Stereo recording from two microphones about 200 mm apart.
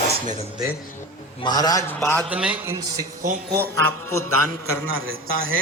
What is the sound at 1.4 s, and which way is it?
Speech, 20° left (ahead or behind).